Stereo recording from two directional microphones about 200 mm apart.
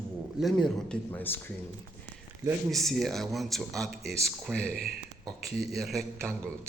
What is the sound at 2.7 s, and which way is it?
Speech, centre (ahead or behind).